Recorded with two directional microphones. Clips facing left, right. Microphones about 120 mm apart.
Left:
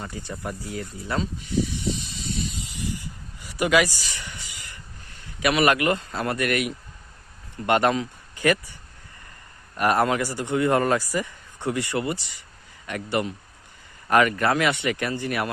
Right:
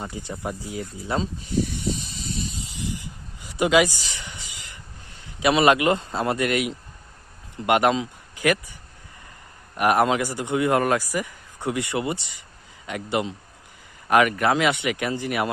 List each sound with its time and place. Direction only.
0.0 s a man's voice: 20° right (ahead or behind)
1.2 s snake: 40° right (ahead or behind)
3.5 s a sound: 20° right (ahead or behind)
5.4 s a man's voice: 25° right (ahead or behind)
9.7 s speech: 15° right (ahead or behind)